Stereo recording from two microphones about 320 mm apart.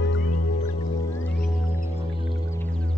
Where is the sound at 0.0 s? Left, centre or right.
Left.